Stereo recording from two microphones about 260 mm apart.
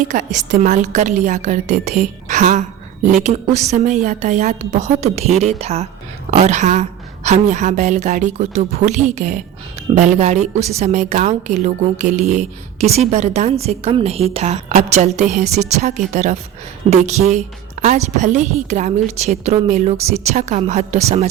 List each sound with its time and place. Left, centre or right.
0.3 s a woman's voice: right